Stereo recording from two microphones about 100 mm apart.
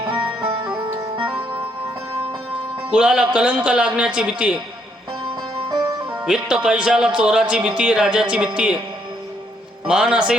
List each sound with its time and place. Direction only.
0.0 s music: 15° right (ahead or behind)
2.9 s a man's voice: 5° right (ahead or behind)
5.7 s music: 40° right (ahead or behind)
6.1 s a man's voice: 10° right (ahead or behind)
9.8 s a man's voice: 10° right (ahead or behind)